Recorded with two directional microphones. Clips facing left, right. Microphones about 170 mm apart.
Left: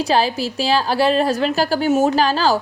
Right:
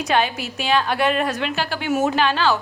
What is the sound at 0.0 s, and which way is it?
A woman's voice, 30° left (ahead or behind).